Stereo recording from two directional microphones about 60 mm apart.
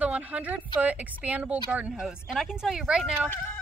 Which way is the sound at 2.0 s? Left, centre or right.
Centre.